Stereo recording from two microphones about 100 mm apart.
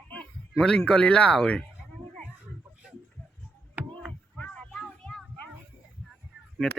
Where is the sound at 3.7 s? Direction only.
20° right (ahead or behind).